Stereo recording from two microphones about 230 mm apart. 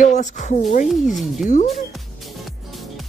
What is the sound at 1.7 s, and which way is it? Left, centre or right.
Music, centre.